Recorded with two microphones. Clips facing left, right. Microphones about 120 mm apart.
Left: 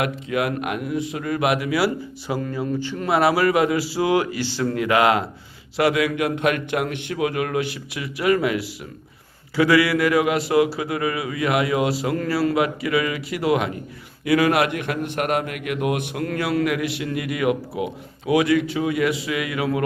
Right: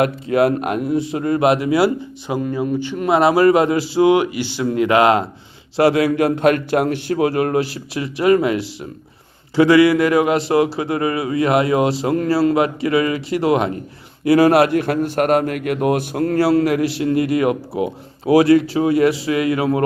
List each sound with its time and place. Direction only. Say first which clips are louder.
0.0 s a man's voice: right 7 dB; 35° right (ahead or behind)